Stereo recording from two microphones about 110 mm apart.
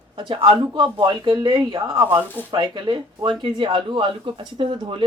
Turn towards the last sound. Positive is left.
turn(degrees=-50)  # may be behind; listen again after turning